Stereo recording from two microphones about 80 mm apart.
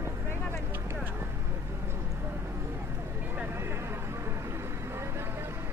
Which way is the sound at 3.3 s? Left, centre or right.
Right.